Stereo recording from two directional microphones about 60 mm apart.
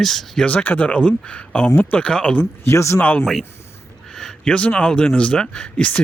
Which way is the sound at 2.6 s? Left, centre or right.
Left.